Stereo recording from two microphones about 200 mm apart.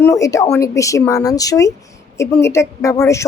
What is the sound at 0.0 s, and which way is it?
A woman's voice, 15° left (ahead or behind).